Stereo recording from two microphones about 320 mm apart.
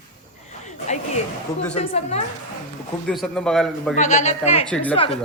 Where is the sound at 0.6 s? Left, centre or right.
Left.